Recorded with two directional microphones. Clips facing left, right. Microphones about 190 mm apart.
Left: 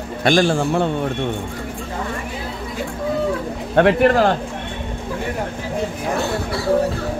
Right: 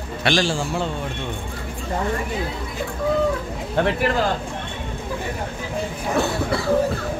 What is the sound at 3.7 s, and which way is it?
Speech, 65° left (ahead or behind).